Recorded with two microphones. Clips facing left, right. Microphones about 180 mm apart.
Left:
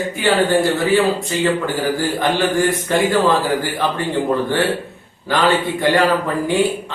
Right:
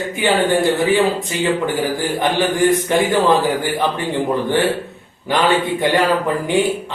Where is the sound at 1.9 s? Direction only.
15° right (ahead or behind).